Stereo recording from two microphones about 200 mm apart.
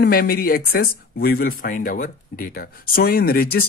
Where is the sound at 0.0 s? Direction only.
50° left (ahead or behind).